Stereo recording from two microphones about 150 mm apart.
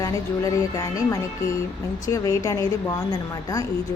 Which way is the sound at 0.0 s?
20° left (ahead or behind).